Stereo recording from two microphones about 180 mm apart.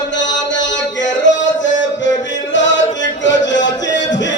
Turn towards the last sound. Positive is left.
turn(degrees=85)